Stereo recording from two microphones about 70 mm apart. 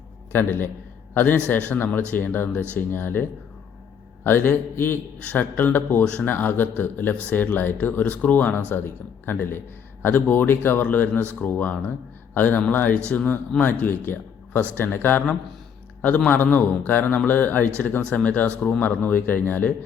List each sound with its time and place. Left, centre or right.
0.3 s a man's voice: left